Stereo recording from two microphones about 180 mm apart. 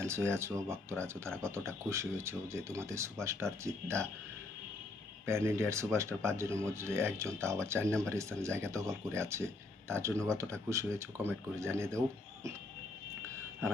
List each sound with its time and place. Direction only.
0.0 s speech: 15° right (ahead or behind)
5.2 s speech: 15° right (ahead or behind)
7.9 s speech: 5° left (ahead or behind)
8.1 s speech: 15° right (ahead or behind)